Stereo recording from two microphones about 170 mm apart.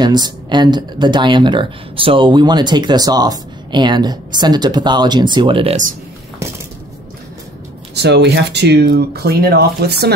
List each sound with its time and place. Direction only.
0.0 s speech: 25° right (ahead or behind)
7.9 s speech: 85° right